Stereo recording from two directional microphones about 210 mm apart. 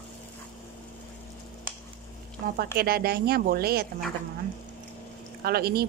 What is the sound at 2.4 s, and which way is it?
A woman's voice, 45° right (ahead or behind).